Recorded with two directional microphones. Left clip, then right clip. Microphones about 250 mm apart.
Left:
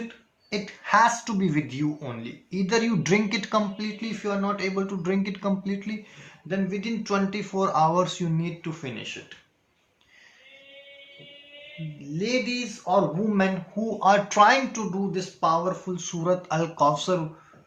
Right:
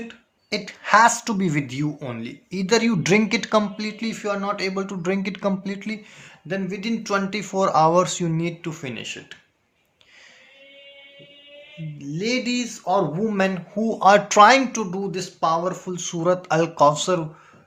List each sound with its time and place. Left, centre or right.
0.5 s speech: right
11.9 s speech: right